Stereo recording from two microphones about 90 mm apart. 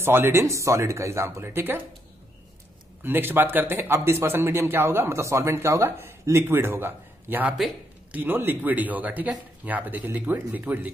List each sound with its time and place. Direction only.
0.0 s speech: 25° right (ahead or behind)
3.0 s a man's voice: 25° right (ahead or behind)